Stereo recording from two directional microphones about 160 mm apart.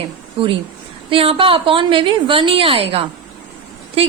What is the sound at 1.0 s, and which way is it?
A woman's voice, 35° right (ahead or behind).